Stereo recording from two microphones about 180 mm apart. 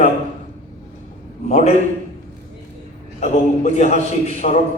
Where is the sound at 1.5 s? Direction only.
40° left (ahead or behind).